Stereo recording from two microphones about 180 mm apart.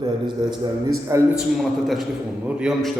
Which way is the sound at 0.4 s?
25° right (ahead or behind).